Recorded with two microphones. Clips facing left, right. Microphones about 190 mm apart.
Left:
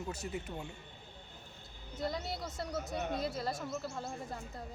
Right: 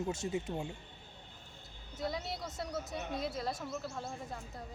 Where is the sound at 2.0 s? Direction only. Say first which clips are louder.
Left 1 dB; centre (ahead or behind).